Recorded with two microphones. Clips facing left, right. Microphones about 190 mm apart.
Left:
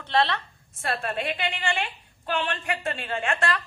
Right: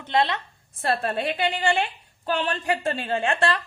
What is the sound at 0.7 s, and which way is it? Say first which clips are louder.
A woman's voice: right 4 dB; 35° right (ahead or behind).